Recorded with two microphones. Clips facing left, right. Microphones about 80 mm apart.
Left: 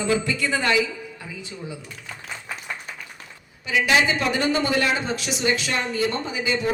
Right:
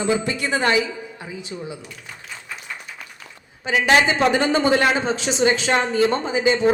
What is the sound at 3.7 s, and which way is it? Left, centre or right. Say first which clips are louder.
Speech: right 3 dB; right.